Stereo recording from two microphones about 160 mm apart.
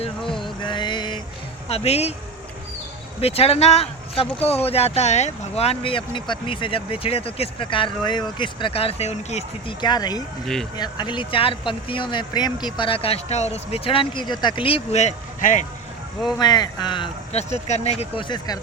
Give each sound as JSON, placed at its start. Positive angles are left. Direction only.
{"t": 0.4, "sound": "mantra", "side_deg": 30}
{"t": 1.7, "sound": "speech", "side_deg": 40}
{"t": 3.2, "sound": "speech", "side_deg": 40}
{"t": 9.8, "sound": "speech", "side_deg": 25}
{"t": 10.4, "sound": "speech", "side_deg": 5}
{"t": 10.8, "sound": "speech", "side_deg": 25}
{"t": 16.4, "sound": "speech", "side_deg": 25}
{"t": 17.3, "sound": "speech", "side_deg": 45}